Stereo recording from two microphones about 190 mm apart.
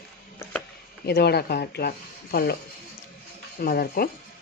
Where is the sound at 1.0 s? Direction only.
55° left (ahead or behind).